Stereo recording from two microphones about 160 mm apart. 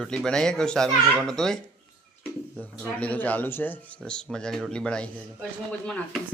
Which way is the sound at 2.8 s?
10° left (ahead or behind).